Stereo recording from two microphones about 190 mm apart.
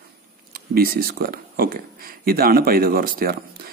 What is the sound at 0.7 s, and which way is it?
A man's voice, 50° right (ahead or behind).